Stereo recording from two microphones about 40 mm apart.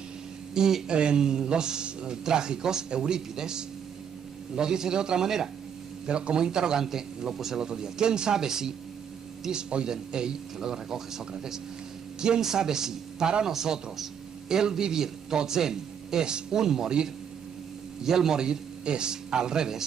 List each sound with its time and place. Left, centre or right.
0.6 s a man's voice: centre
0.8 s a man's voice: right
6.0 s a man's voice: right